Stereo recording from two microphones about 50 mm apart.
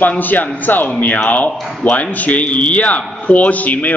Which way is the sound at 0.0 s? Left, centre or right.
Left.